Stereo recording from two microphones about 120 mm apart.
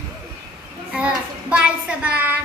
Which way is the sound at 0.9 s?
10° right (ahead or behind).